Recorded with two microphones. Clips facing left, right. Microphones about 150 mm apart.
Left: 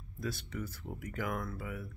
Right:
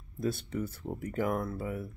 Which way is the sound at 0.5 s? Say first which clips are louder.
Right 6 dB; 30° right (ahead or behind).